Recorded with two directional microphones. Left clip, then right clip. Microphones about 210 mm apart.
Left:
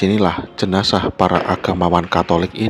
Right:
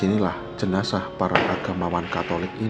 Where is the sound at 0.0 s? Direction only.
40° left (ahead or behind).